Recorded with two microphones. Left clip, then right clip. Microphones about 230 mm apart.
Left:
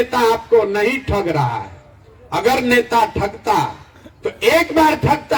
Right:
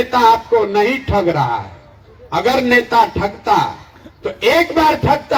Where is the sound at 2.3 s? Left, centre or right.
Left.